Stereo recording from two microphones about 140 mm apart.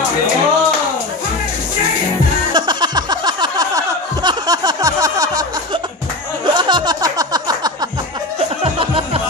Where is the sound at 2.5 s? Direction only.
30° right (ahead or behind).